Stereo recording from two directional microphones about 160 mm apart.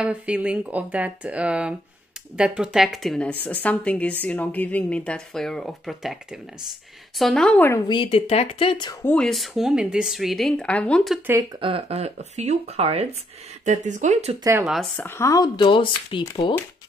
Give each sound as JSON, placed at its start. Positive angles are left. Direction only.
{"t": 0.0, "sound": "a woman's voice", "side_deg": -5}
{"t": 7.9, "sound": "speech", "side_deg": 35}
{"t": 9.0, "sound": "speech", "side_deg": 5}
{"t": 11.6, "sound": "speech", "side_deg": -35}
{"t": 13.7, "sound": "speech", "side_deg": -50}
{"t": 14.6, "sound": "speech", "side_deg": 0}
{"t": 15.0, "sound": "speech", "side_deg": 15}